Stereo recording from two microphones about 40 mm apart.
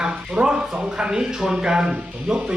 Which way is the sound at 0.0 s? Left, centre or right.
Right.